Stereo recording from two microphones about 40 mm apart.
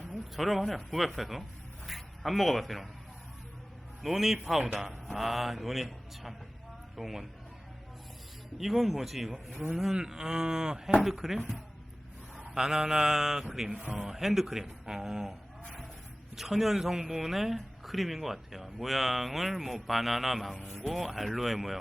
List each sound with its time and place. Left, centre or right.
0.1 s speech: centre
4.0 s speech: centre
8.5 s speech: centre
12.5 s speech: centre